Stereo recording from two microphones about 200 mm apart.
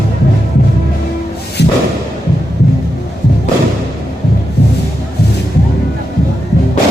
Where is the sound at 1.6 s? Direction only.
60° left (ahead or behind).